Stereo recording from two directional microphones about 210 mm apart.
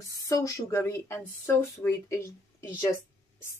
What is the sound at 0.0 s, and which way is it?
A woman's voice, 15° left (ahead or behind).